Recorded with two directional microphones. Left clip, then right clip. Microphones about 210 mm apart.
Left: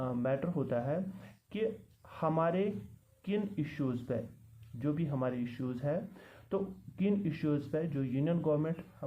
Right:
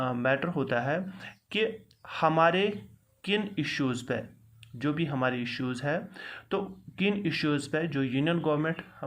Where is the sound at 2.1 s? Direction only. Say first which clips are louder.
Right 8 dB; 15° right (ahead or behind).